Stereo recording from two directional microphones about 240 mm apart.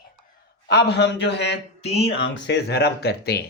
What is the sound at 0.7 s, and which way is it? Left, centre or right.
A man's voice, left.